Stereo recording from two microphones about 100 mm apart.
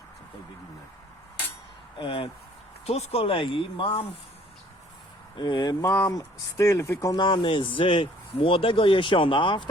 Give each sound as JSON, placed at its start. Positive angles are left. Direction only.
{"t": 2.0, "sound": "speech", "side_deg": 60}
{"t": 2.8, "sound": "speech", "side_deg": 90}
{"t": 5.4, "sound": "speech", "side_deg": 45}
{"t": 5.8, "sound": "speech", "side_deg": 30}
{"t": 7.2, "sound": "speech", "side_deg": 55}